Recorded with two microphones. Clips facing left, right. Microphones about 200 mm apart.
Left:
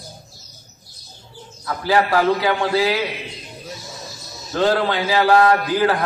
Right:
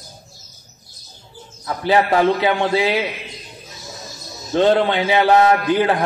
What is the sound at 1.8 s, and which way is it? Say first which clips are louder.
Speech: right 2 dB; 25° right (ahead or behind).